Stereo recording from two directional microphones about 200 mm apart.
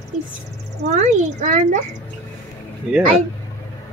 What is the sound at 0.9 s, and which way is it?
Speech, 35° right (ahead or behind).